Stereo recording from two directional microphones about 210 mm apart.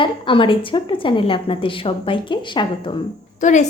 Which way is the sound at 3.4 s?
35° left (ahead or behind).